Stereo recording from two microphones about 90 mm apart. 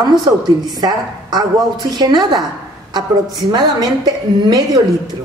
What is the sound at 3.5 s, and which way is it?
A woman's voice, 50° right (ahead or behind).